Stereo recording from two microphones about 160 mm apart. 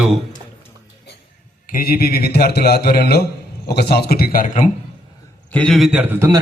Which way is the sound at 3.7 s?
90° left.